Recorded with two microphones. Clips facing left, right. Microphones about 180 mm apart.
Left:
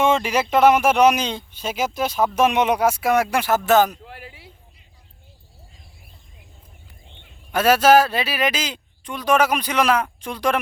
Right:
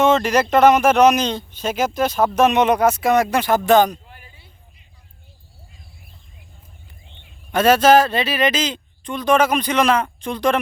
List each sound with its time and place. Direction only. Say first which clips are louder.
0.0 s speech: right 3 dB; 10° left (ahead or behind)
4.0 s a sound: left 7 dB; 90° left
7.1 s speech: right 2 dB; 5° left (ahead or behind)